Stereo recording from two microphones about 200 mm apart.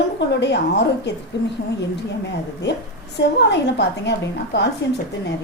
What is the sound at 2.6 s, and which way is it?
A woman's voice, 55° left (ahead or behind).